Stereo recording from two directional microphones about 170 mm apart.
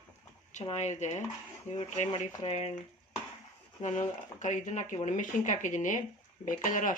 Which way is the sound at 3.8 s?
45° left (ahead or behind).